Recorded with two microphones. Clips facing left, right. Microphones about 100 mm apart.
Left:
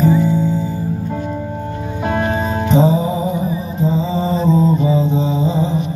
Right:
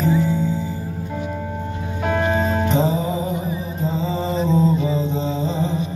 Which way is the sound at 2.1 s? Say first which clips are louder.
Even; 20° left (ahead or behind).